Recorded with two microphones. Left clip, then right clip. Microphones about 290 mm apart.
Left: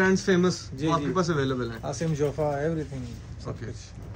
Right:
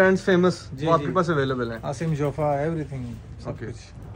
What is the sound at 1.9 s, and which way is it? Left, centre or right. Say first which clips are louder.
Speech: right 1 dB; right.